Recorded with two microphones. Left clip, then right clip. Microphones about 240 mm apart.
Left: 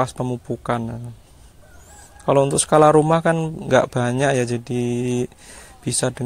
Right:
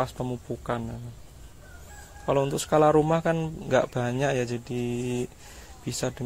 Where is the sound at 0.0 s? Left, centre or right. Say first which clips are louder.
Left 7 dB; left.